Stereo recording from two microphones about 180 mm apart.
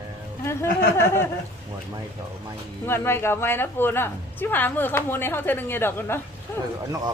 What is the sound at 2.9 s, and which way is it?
A woman's voice, 15° left (ahead or behind).